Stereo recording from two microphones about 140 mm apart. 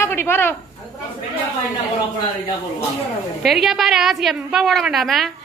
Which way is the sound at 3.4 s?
Centre (ahead or behind).